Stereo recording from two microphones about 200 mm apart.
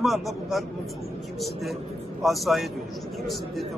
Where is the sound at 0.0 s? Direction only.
Centre (ahead or behind).